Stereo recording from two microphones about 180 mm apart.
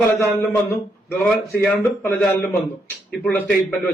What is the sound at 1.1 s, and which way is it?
A man's voice, 5° left (ahead or behind).